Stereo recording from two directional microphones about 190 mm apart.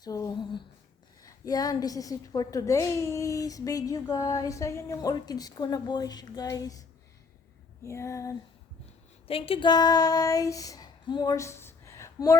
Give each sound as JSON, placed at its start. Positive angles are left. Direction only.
{"t": 0.0, "sound": "a woman's voice", "side_deg": 20}
{"t": 7.9, "sound": "female singing", "side_deg": 15}
{"t": 9.2, "sound": "child singing", "side_deg": 30}